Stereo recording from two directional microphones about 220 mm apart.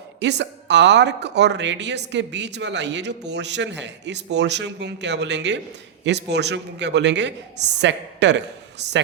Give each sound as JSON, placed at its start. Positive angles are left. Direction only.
{"t": 0.2, "sound": "speech", "side_deg": -50}